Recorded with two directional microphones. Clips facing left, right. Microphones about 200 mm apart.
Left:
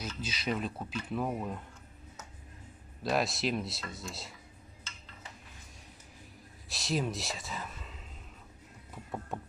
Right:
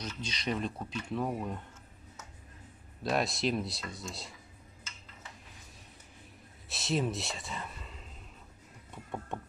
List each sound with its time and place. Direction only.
0.0 s speech: 5° left (ahead or behind)
3.0 s speech: centre (ahead or behind)
6.7 s speech: centre (ahead or behind)
8.9 s a sound: centre (ahead or behind)